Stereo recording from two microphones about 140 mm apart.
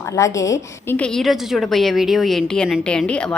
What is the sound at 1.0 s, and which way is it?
A woman's voice, 5° left (ahead or behind).